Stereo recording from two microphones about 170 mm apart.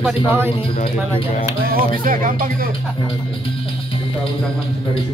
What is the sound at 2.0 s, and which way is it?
Speech, 55° right (ahead or behind).